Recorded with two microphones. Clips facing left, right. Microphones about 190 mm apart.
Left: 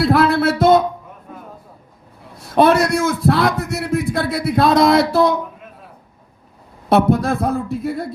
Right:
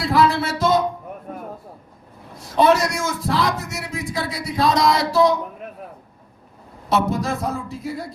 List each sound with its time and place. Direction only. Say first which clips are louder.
0.0 s music: left 4 dB; 60° left (ahead or behind)
2.4 s a man's voice: left 3 dB; 60° left (ahead or behind)
7.1 s a man's voice: left 7 dB; 60° left (ahead or behind)